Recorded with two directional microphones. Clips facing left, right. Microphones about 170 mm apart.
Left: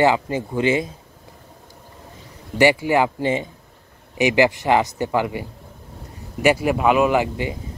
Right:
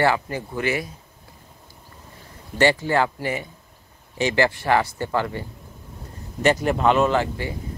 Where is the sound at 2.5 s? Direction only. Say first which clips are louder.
Left 3 dB; 15° left (ahead or behind).